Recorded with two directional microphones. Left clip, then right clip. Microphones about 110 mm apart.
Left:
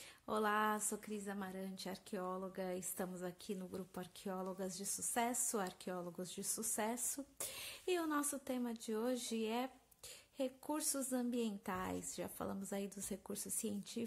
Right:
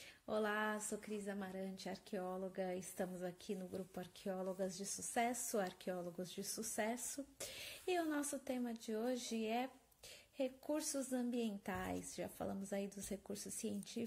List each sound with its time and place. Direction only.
0.3 s a woman's voice: 45° left (ahead or behind)